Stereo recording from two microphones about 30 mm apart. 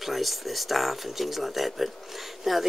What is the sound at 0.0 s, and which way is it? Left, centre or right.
Speech, centre.